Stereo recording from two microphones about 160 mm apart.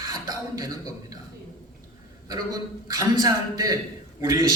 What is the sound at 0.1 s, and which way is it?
Beatboxing, 25° right (ahead or behind).